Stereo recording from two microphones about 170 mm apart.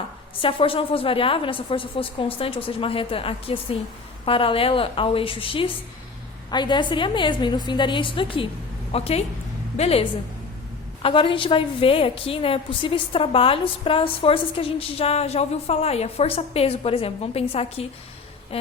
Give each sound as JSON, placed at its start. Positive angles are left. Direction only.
{"t": 0.3, "sound": "a woman's voice", "side_deg": 30}